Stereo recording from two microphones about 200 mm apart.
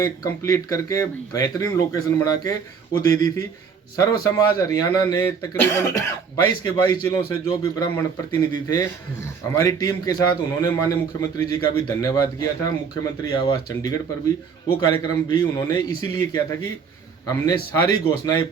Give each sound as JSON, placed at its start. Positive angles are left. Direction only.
{"t": 0.0, "sound": "speech", "side_deg": 15}